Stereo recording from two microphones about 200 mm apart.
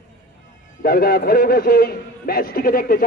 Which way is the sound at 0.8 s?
50° left (ahead or behind).